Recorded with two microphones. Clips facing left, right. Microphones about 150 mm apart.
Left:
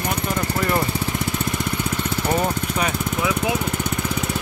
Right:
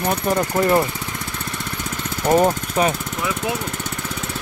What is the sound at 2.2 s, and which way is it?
Speech, 35° right (ahead or behind).